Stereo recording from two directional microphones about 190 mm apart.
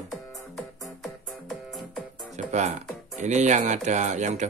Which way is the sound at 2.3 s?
40° right (ahead or behind).